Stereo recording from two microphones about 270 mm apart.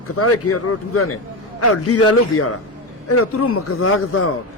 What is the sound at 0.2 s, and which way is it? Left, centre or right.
A man's voice, left.